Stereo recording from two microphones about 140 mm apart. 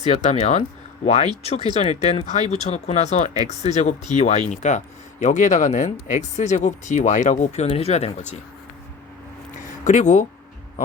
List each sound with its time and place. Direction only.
0.0 s speech: 50° left (ahead or behind)
9.8 s speech: 60° left (ahead or behind)